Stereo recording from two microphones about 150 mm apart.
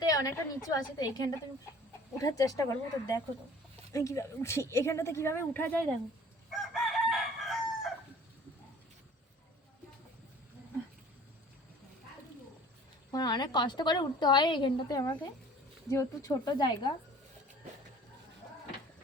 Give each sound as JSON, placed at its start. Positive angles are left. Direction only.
{"t": 0.0, "sound": "a woman's voice", "side_deg": 25}
{"t": 3.9, "sound": "a woman's voice", "side_deg": 20}
{"t": 6.5, "sound": "chicken", "side_deg": 0}
{"t": 13.1, "sound": "a woman's voice", "side_deg": 25}